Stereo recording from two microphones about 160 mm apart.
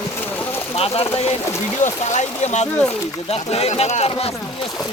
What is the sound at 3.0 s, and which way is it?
Speech, 20° left (ahead or behind).